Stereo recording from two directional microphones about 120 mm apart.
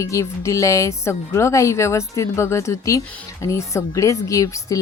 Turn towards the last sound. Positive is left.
turn(degrees=25)  # may be behind; listen again after turning